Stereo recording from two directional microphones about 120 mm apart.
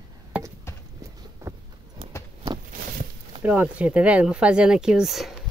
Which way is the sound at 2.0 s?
50° right (ahead or behind).